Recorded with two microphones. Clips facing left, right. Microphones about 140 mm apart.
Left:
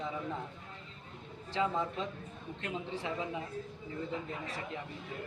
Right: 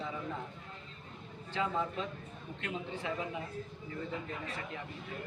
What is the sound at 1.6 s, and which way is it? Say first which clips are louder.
Speech: left 1 dB; 15° left (ahead or behind).